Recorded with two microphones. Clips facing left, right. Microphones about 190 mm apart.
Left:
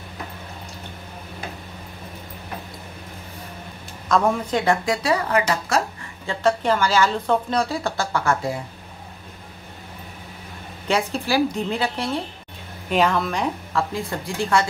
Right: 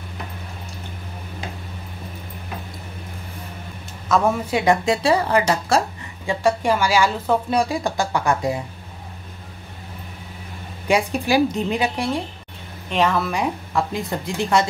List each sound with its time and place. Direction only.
4.1 s a woman's voice: 5° right (ahead or behind)
4.8 s speech: 30° right (ahead or behind)
6.2 s a woman's voice: 10° right (ahead or behind)
10.9 s a woman's voice: 15° right (ahead or behind)
12.9 s a woman's voice: centre (ahead or behind); by 14.7 s 20° right (ahead or behind)